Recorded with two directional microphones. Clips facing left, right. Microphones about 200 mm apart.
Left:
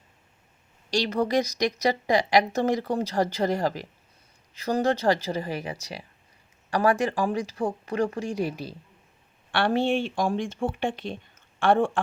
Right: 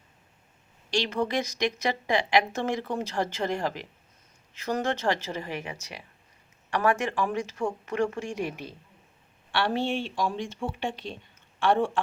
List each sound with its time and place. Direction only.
0.9 s a woman's voice: 40° left (ahead or behind)
9.5 s speech: 50° left (ahead or behind)